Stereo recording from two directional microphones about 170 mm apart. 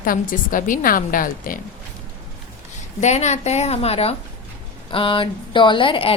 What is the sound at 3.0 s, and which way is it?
A woman's voice, 40° left (ahead or behind).